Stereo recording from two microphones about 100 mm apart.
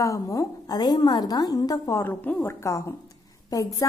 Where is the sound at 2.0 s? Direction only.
20° left (ahead or behind).